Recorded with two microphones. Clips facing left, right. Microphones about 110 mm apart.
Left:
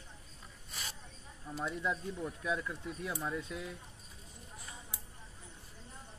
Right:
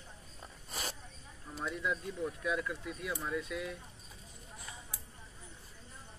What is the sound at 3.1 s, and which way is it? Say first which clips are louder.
Speech: right 1 dB; 15° left (ahead or behind).